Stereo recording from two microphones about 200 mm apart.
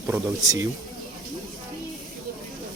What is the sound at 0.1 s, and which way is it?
Speech, 15° right (ahead or behind).